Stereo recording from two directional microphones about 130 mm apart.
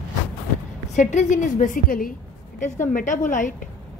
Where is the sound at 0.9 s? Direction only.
70° left (ahead or behind).